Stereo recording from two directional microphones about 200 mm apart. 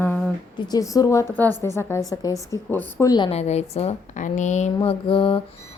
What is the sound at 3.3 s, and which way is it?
A woman's voice, 35° left (ahead or behind).